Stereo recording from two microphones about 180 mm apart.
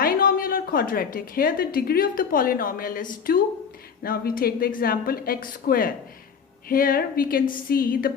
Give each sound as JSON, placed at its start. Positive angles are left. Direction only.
{"t": 0.0, "sound": "a woman's voice", "side_deg": 55}